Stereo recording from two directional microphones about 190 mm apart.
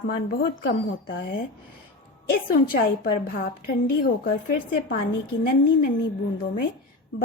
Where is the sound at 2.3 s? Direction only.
50° left (ahead or behind).